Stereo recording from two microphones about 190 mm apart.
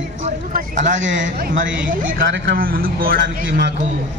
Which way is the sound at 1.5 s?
45° right (ahead or behind).